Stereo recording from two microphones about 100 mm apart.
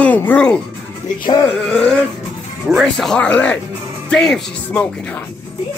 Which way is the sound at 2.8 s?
5° left (ahead or behind).